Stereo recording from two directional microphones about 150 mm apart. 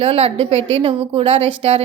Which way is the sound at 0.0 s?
40° right (ahead or behind).